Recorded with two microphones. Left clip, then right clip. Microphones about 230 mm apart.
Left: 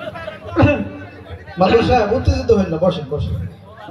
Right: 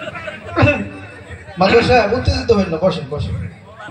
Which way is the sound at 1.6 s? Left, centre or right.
Left.